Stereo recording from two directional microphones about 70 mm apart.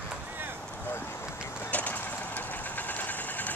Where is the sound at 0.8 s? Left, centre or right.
Left.